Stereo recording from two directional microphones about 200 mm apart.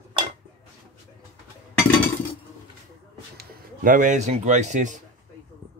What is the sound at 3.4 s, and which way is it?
Speech, 40° right (ahead or behind).